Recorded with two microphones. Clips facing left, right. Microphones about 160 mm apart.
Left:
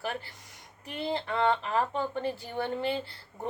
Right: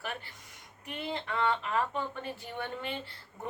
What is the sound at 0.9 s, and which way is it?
Speech, 35° left (ahead or behind).